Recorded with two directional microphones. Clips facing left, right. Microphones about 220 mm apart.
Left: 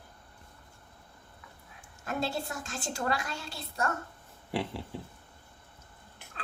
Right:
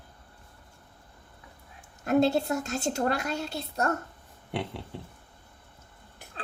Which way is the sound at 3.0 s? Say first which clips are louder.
Right 3 dB; 35° right (ahead or behind).